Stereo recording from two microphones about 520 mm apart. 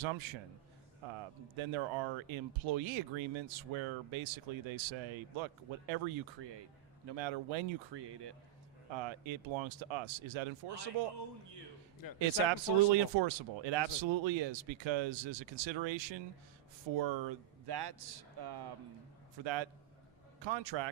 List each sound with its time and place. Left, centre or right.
0.0 s speech: right
1.5 s speech: right
8.9 s speech: right
12.0 s a man's voice: left
12.5 s speech: right